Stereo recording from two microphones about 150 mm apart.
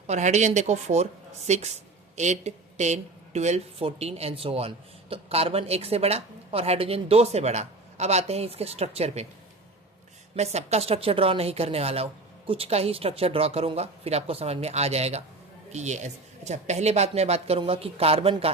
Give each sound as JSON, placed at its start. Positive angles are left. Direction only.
{"t": 0.1, "sound": "speech", "side_deg": -50}
{"t": 10.3, "sound": "speech", "side_deg": -45}